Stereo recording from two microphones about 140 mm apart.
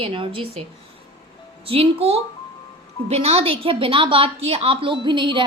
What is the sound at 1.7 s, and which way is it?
A woman's voice, 45° right (ahead or behind).